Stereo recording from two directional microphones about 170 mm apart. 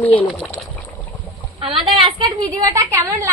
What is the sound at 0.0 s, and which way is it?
Speech, 10° left (ahead or behind).